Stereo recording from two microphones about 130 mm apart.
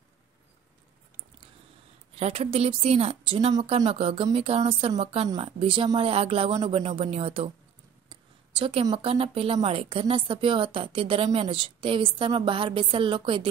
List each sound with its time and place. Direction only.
2.1 s a woman's voice: 50° right (ahead or behind)
8.1 s a sound: 45° right (ahead or behind)
8.9 s a woman's voice: 45° right (ahead or behind)